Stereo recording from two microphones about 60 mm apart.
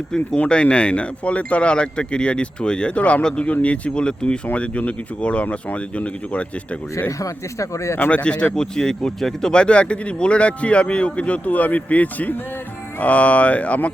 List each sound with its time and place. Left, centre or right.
0.3 s a man's voice: centre
7.2 s speech: left
8.1 s a man's voice: centre